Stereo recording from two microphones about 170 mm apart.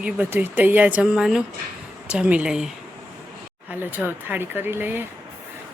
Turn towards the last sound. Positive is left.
turn(degrees=-10)  # may be behind; listen again after turning